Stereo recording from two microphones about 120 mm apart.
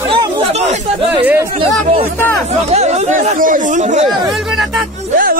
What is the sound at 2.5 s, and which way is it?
Speech, 65° right (ahead or behind).